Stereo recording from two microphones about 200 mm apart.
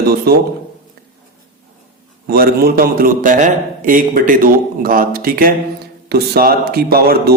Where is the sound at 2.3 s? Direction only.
50° right (ahead or behind).